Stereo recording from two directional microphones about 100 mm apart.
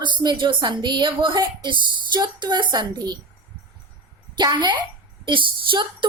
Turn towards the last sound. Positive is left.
turn(degrees=-55)  # may be behind; listen again after turning